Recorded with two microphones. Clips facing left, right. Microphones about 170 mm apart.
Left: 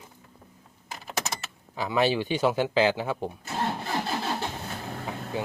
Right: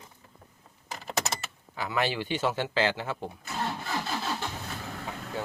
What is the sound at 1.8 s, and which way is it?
Speech, 15° left (ahead or behind).